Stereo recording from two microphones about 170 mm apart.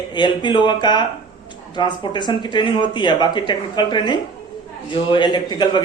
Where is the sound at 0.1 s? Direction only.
25° left (ahead or behind).